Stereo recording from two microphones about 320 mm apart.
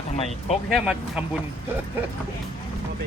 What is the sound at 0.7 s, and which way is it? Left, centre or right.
Speech, centre.